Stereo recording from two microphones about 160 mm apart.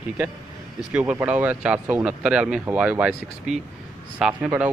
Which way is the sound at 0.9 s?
10° right (ahead or behind).